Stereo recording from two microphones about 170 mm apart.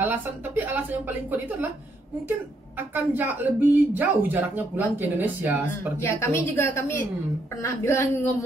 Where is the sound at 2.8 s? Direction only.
10° right (ahead or behind).